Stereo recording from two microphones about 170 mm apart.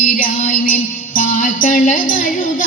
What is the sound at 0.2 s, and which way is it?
Music, 55° left (ahead or behind).